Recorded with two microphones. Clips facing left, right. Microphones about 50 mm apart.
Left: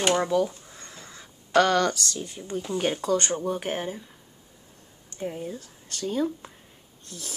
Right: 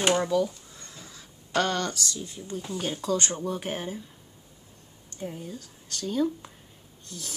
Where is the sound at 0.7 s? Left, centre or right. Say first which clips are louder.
Left 2 dB; centre.